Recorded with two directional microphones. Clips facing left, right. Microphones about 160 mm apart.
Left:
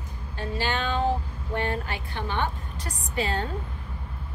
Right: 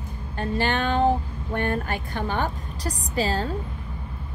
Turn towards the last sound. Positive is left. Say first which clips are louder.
# right 3 dB
turn(degrees=-35)  # may be behind; listen again after turning